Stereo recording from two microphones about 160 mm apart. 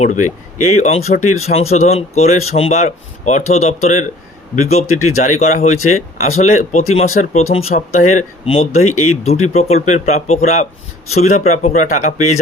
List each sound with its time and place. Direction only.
0.0 s speech: 45° left (ahead or behind)